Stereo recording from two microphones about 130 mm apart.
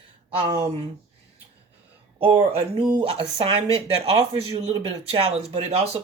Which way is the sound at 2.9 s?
45° right (ahead or behind).